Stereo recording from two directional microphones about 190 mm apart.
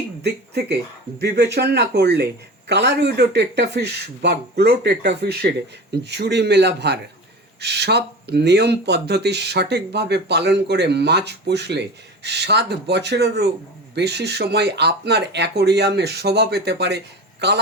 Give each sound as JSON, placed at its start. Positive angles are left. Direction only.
{"t": 0.2, "sound": "speech", "side_deg": -60}